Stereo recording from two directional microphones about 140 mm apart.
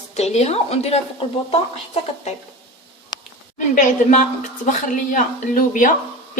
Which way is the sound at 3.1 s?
30° left (ahead or behind).